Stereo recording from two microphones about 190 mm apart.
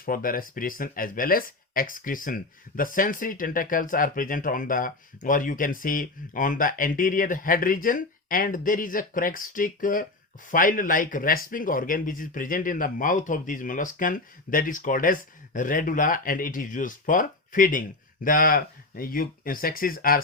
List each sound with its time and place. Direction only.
0.0 s speech: 50° left (ahead or behind)